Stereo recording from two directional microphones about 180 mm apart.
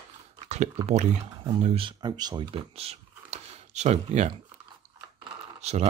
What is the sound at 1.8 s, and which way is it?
Speech, 25° right (ahead or behind).